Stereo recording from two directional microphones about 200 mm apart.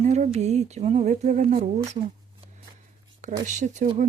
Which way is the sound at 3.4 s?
40° right (ahead or behind).